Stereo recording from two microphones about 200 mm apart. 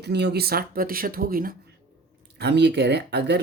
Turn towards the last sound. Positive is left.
turn(degrees=-55)  # may be behind; listen again after turning